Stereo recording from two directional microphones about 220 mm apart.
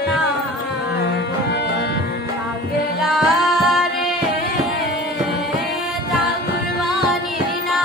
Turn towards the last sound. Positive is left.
turn(degrees=0)  # may be behind; listen again after turning